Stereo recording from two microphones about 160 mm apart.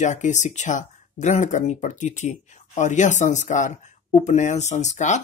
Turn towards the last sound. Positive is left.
turn(degrees=50)  # may be behind; listen again after turning